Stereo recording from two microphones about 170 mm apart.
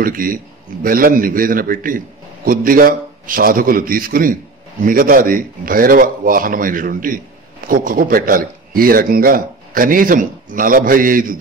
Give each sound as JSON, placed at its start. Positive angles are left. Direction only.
{"t": 0.0, "sound": "speech", "side_deg": -55}